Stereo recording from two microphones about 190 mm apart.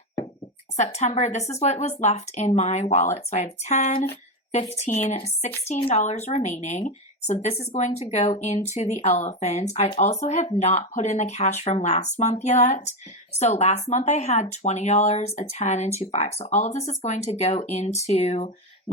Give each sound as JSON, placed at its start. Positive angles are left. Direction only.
{"t": 0.8, "sound": "speech", "side_deg": 35}